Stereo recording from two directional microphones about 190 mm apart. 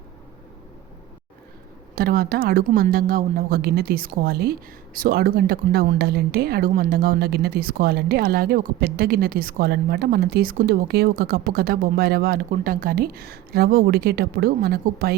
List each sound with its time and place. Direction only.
2.0 s speech: 50° right (ahead or behind)